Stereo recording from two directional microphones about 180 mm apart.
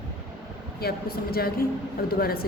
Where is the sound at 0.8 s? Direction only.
55° left (ahead or behind).